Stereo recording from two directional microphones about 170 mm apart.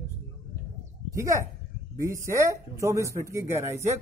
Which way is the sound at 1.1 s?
15° right (ahead or behind).